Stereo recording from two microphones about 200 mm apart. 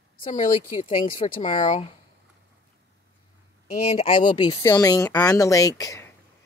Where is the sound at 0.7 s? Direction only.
25° left (ahead or behind).